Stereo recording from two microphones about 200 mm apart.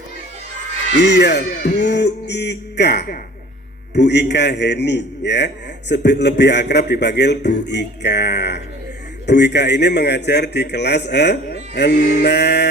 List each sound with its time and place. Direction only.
1.0 s a man's voice: 60° left (ahead or behind)